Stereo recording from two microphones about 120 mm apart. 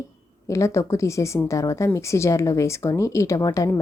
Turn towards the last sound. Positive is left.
turn(degrees=25)  # may be behind; listen again after turning